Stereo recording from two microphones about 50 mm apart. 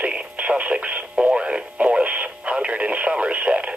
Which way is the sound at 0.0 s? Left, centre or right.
Right.